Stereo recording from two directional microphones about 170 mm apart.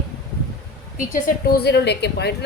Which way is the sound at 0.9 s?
55° left (ahead or behind).